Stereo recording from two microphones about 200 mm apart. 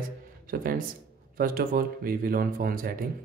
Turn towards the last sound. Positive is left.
turn(degrees=-45)  # may be behind; listen again after turning